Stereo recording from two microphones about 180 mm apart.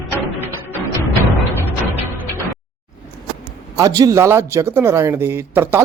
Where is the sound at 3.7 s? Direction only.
20° right (ahead or behind).